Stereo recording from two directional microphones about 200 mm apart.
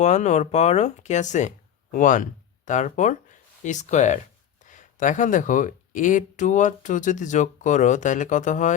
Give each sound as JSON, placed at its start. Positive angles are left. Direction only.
{"t": 0.0, "sound": "speech", "side_deg": 35}